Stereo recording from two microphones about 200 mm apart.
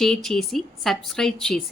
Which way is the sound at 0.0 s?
Centre (ahead or behind).